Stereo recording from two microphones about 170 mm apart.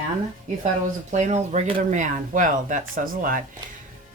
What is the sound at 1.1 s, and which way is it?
Speech, 40° right (ahead or behind).